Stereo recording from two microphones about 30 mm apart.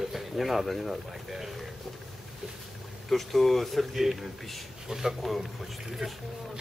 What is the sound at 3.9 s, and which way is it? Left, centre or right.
Speech, centre.